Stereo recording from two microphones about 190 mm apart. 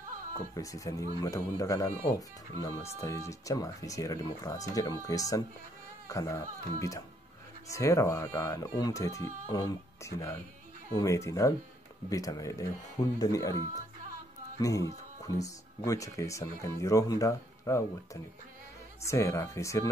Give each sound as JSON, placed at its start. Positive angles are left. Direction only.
{"t": 0.6, "sound": "speech", "side_deg": 20}
{"t": 14.6, "sound": "speech", "side_deg": 15}